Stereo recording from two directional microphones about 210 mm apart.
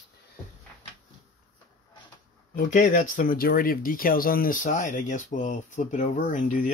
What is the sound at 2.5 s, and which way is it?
Speech, 35° left (ahead or behind).